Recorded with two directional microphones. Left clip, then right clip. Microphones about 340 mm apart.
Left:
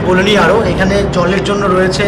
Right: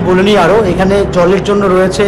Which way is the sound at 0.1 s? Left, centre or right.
Centre.